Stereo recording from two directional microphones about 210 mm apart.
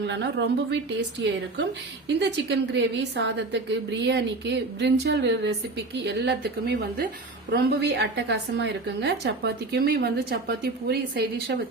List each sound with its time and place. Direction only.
0.0 s a woman's voice: 55° right (ahead or behind)
2.0 s a woman's voice: 55° right (ahead or behind)